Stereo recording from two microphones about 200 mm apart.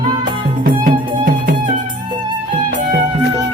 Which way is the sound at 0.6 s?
45° right (ahead or behind).